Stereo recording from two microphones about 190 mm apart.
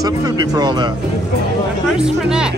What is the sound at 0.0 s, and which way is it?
Speech, 20° right (ahead or behind).